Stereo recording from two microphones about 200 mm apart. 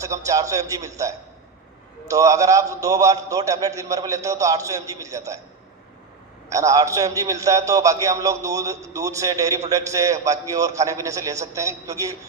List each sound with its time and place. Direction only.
0.0 s a man's voice: 15° right (ahead or behind)
6.5 s a man's voice: 15° right (ahead or behind)